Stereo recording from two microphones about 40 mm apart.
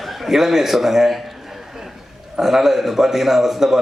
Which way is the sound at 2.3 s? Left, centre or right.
Centre.